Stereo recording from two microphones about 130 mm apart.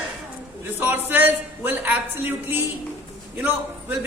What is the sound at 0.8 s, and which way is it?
A woman's voice, 15° right (ahead or behind).